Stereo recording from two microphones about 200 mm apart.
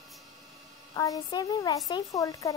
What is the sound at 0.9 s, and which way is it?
Speech, 15° left (ahead or behind).